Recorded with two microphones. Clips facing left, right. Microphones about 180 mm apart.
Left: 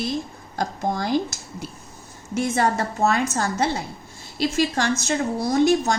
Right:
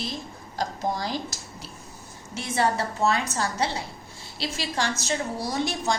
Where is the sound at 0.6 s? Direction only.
55° left (ahead or behind).